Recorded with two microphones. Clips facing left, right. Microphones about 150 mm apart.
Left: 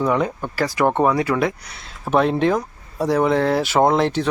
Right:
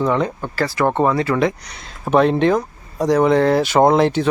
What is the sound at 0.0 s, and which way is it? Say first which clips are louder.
Speech: right 1 dB; 10° left (ahead or behind).